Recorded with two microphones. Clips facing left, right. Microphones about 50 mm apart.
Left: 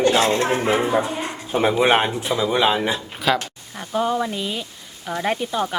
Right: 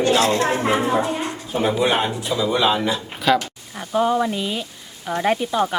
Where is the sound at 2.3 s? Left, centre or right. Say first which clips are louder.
Even; left.